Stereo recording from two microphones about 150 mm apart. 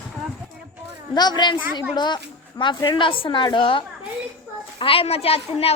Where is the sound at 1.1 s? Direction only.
30° left (ahead or behind).